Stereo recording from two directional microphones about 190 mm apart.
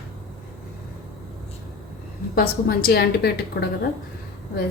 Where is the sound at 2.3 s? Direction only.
55° left (ahead or behind).